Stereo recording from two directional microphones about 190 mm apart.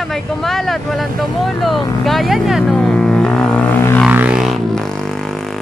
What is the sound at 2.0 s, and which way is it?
Vehicle, centre (ahead or behind).